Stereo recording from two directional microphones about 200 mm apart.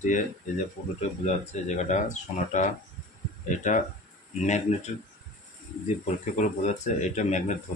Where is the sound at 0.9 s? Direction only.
35° left (ahead or behind).